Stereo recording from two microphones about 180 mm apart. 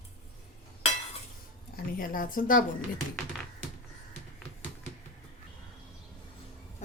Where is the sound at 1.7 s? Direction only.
50° left (ahead or behind).